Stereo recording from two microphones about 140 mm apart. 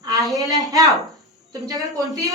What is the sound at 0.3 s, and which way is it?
Speech, 25° right (ahead or behind).